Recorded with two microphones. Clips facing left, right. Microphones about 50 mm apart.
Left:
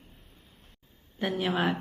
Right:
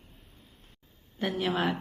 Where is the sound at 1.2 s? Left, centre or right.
Centre.